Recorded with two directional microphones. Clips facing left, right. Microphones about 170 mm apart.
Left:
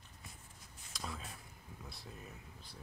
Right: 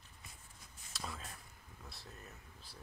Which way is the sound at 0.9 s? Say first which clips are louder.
Left 1 dB; centre (ahead or behind).